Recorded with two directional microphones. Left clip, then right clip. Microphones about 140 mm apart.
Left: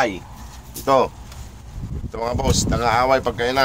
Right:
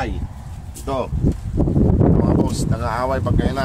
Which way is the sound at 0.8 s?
10° right (ahead or behind).